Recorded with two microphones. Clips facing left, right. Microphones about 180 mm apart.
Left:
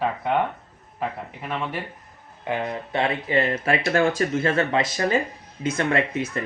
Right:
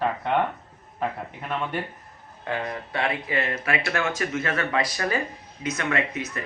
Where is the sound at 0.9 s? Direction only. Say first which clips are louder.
Even; 5° left (ahead or behind).